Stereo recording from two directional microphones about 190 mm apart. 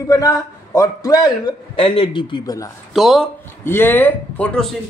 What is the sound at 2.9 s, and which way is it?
Speech, centre (ahead or behind).